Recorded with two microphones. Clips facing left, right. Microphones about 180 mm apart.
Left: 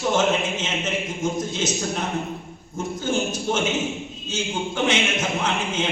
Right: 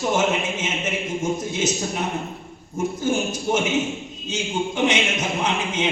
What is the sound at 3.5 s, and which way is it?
A man's voice, 10° right (ahead or behind).